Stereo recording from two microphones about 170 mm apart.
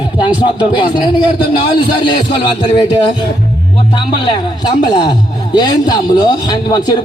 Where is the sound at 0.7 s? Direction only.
25° left (ahead or behind).